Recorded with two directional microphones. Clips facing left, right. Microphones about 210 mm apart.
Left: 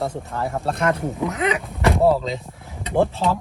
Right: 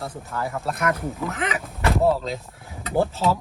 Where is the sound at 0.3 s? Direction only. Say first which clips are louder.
Left 3 dB; 30° left (ahead or behind).